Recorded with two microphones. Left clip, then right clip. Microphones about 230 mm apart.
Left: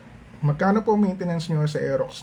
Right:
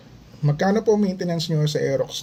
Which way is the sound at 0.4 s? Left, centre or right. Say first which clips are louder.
Right 2 dB; centre.